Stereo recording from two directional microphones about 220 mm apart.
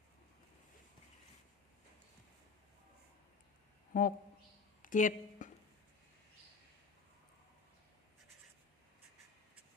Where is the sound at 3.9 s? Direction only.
40° left (ahead or behind).